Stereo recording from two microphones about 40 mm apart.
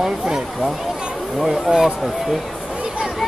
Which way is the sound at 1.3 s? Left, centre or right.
Centre.